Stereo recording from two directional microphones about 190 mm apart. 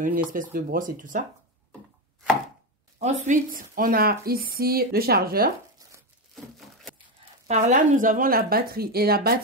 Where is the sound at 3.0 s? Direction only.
45° right (ahead or behind).